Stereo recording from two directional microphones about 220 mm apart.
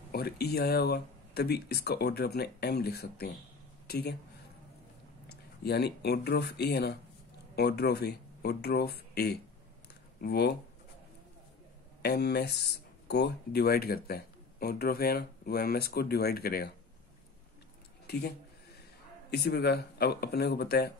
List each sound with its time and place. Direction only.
0.1 s speech: 45° left (ahead or behind)
5.3 s speech: 45° left (ahead or behind)
12.0 s speech: 50° left (ahead or behind)
18.0 s speech: 45° left (ahead or behind)
19.3 s speech: 50° left (ahead or behind)